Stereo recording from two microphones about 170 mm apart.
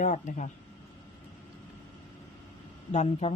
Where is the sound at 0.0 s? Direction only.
50° left (ahead or behind).